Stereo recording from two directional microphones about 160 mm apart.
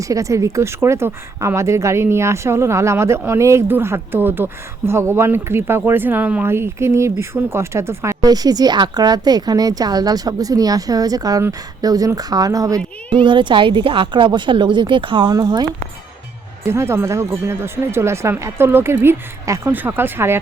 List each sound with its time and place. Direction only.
0.0 s a woman's voice: 20° right (ahead or behind)
16.6 s speech: 15° right (ahead or behind)